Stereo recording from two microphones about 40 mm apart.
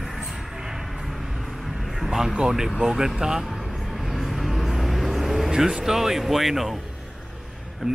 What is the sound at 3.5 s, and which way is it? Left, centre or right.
Vehicle, centre.